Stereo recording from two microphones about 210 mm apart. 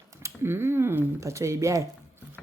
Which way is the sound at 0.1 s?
10° right (ahead or behind).